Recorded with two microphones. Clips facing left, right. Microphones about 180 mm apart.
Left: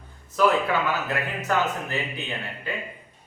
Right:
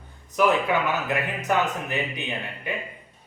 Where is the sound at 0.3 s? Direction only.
15° right (ahead or behind).